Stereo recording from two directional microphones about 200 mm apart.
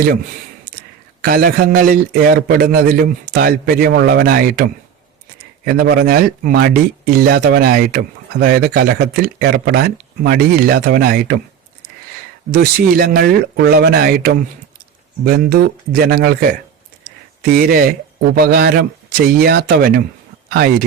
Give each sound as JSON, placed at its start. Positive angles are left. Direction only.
{"t": 1.2, "sound": "speech", "side_deg": -45}
{"t": 12.5, "sound": "speech", "side_deg": -50}